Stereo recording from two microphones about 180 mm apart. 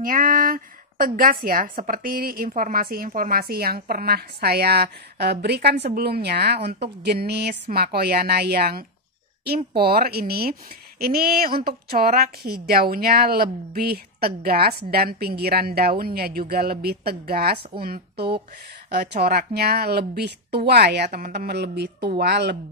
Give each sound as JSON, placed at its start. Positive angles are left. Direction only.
{"t": 0.0, "sound": "a woman's voice", "side_deg": -50}